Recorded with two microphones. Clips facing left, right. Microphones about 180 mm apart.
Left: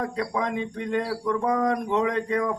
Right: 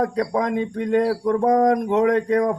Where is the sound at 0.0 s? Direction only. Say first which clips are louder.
Right 6 dB; 45° right (ahead or behind).